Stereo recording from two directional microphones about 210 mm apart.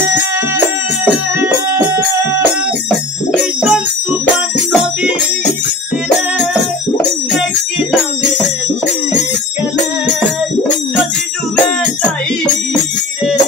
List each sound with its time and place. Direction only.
1.0 s music: 10° right (ahead or behind)
3.3 s music: centre (ahead or behind)
6.5 s music: 5° left (ahead or behind)